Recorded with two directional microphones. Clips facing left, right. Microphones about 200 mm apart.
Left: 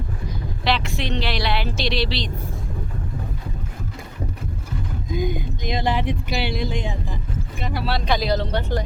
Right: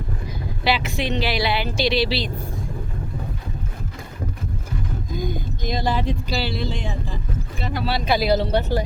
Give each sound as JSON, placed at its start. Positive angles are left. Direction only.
{"t": 0.6, "sound": "speech", "side_deg": -5}
{"t": 5.3, "sound": "speech", "side_deg": 20}
{"t": 7.6, "sound": "a sound", "side_deg": 10}
{"t": 7.9, "sound": "speech", "side_deg": -5}